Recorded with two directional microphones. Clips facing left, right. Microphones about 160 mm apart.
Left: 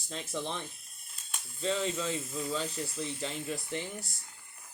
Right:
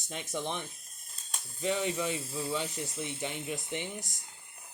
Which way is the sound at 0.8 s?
40° right (ahead or behind).